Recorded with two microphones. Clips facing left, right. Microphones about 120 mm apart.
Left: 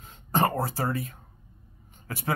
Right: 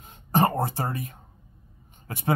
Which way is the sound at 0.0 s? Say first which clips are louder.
Right 2 dB; 15° right (ahead or behind).